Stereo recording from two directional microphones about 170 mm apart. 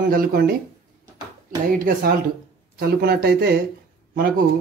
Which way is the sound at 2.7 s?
65° right (ahead or behind).